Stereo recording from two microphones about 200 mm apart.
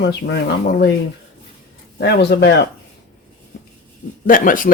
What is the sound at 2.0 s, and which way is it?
Speech, 60° left (ahead or behind).